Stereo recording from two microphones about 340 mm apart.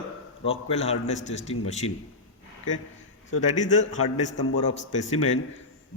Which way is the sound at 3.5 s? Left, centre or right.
Left.